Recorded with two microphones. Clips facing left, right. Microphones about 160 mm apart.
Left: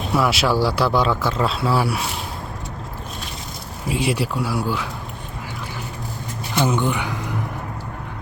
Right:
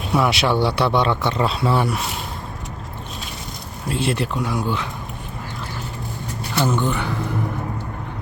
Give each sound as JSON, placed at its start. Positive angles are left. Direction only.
{"t": 0.1, "sound": "speech", "side_deg": 0}
{"t": 3.8, "sound": "speech", "side_deg": 10}
{"t": 6.6, "sound": "speech", "side_deg": 15}